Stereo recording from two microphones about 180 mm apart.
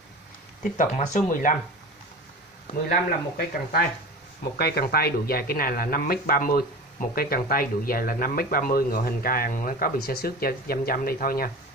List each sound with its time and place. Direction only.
0.7 s speech: 40° left (ahead or behind)
2.9 s speech: 55° left (ahead or behind)